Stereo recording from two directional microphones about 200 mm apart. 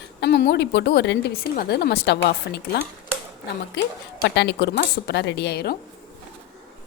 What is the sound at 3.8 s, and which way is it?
A woman's voice, 55° left (ahead or behind).